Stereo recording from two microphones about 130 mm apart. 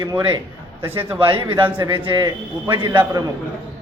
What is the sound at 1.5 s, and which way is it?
A man's voice, 40° right (ahead or behind).